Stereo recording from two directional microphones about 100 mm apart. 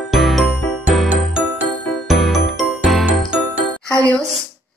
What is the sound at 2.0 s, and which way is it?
Music, centre (ahead or behind).